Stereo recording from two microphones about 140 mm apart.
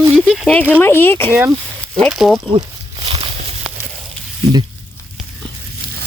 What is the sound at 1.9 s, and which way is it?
Speech, centre (ahead or behind).